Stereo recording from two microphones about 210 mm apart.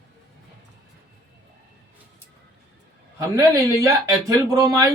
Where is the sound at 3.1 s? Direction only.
15° right (ahead or behind).